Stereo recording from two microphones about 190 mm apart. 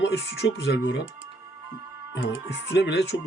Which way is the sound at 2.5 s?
65° left (ahead or behind).